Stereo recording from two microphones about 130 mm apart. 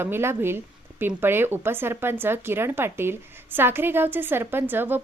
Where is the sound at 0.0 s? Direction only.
20° right (ahead or behind).